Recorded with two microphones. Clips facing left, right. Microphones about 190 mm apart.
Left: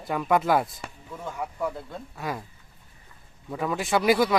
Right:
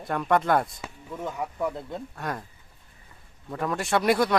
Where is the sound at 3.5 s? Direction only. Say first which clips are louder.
Even; centre (ahead or behind).